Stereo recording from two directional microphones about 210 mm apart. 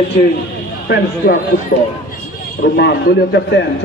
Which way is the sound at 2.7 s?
55° left (ahead or behind).